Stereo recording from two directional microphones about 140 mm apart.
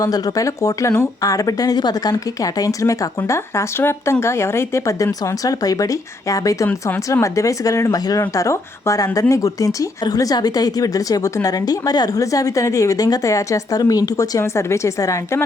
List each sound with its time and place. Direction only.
0.0 s a woman's voice: 25° left (ahead or behind)